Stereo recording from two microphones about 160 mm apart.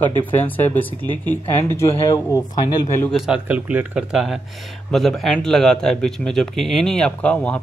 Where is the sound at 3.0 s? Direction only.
Centre (ahead or behind).